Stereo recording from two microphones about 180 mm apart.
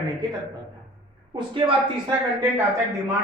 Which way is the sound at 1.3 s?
25° right (ahead or behind).